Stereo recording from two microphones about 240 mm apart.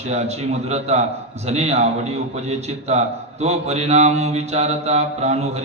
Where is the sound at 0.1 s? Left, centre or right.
Right.